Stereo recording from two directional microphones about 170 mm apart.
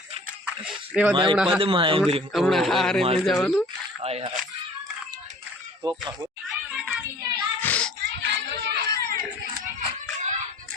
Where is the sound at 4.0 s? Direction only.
35° right (ahead or behind).